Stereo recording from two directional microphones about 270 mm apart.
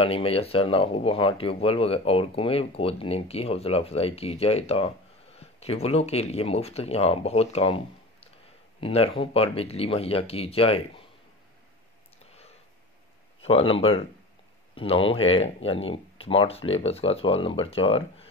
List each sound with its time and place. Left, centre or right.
0.0 s speech: left
8.8 s speech: left
13.4 s speech: left